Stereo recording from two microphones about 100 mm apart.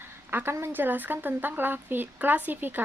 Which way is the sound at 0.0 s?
20° right (ahead or behind).